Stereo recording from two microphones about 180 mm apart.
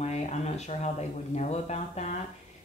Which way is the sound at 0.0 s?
40° left (ahead or behind).